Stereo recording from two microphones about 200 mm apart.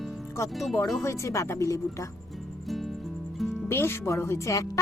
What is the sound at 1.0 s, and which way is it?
A woman's voice, 15° left (ahead or behind).